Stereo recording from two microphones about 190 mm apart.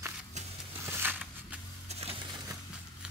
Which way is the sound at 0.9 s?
10° right (ahead or behind).